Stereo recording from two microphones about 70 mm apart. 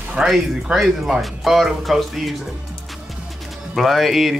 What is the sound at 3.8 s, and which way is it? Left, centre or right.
Speech, centre.